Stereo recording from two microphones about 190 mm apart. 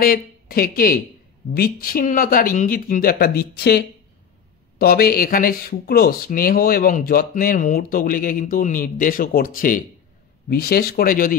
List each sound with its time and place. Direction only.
0.0 s speech: 50° left (ahead or behind)